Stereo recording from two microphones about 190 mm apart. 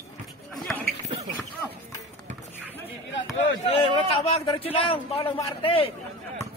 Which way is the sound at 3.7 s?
30° left (ahead or behind).